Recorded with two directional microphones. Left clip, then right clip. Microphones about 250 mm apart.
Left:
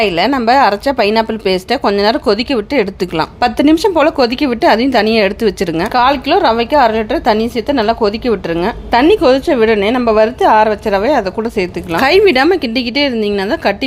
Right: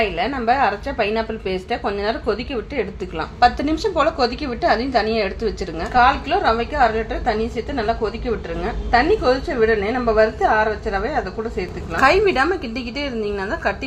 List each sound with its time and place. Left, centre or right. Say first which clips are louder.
0.0 s a woman's voice: left 8 dB; left